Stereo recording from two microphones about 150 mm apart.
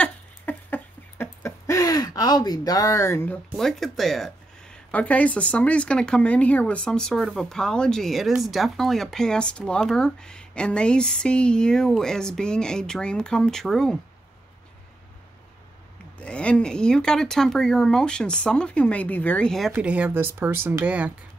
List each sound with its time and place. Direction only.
0.0 s a sound: 10° left (ahead or behind)
3.5 s speech: centre (ahead or behind)
16.2 s speech: 5° left (ahead or behind)
19.7 s speech: 10° right (ahead or behind)